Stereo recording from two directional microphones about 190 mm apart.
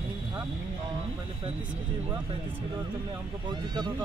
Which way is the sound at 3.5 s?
20° right (ahead or behind).